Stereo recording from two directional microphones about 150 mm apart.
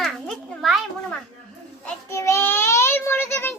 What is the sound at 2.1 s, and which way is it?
Child singing, 20° left (ahead or behind).